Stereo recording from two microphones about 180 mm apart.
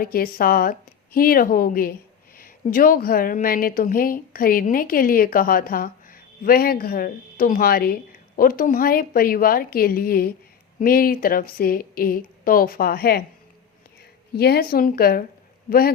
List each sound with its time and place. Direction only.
0.0 s a woman's voice: 55° left (ahead or behind)
14.3 s a woman's voice: 60° left (ahead or behind)